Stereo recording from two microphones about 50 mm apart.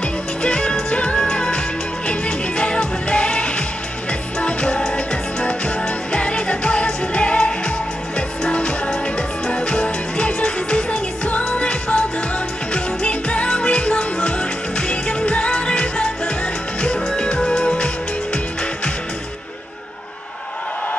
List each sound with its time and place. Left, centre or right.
0.4 s music: left
17.1 s music: centre